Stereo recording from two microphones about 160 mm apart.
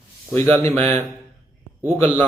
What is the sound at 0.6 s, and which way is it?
Speech, 15° left (ahead or behind).